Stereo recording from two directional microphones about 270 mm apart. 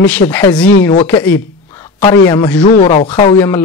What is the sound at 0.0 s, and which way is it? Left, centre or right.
Speech, centre.